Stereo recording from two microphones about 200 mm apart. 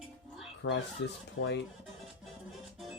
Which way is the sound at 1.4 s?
90° left.